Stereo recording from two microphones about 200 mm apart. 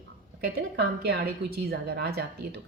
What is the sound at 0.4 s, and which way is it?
A woman's voice, 55° right (ahead or behind).